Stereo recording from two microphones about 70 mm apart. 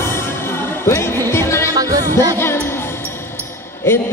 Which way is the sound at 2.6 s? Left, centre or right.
Left.